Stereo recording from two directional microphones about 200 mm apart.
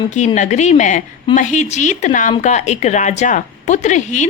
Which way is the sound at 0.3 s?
35° left (ahead or behind).